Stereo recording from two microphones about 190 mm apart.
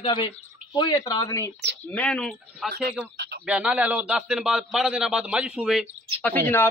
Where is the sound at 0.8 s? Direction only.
20° left (ahead or behind).